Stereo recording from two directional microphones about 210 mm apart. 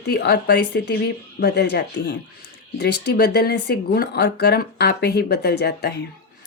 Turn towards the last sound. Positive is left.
turn(degrees=50)  # may be behind; listen again after turning